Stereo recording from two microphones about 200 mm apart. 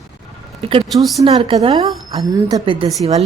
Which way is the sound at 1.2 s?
30° right (ahead or behind).